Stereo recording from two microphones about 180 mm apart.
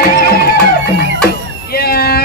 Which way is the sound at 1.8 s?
60° left (ahead or behind).